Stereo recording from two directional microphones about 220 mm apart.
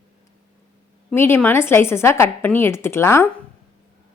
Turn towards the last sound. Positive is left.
turn(degrees=10)  # may be behind; listen again after turning